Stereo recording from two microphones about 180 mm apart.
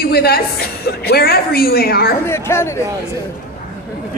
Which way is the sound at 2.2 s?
15° left (ahead or behind).